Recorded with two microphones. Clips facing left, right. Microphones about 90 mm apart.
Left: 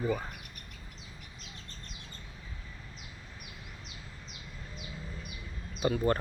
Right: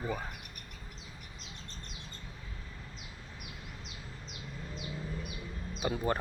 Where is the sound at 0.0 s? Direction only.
Centre (ahead or behind).